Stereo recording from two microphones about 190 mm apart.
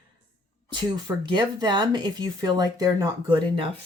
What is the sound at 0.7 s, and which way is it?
Speech, 25° right (ahead or behind).